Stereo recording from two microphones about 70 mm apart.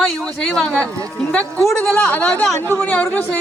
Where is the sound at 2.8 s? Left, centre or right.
Left.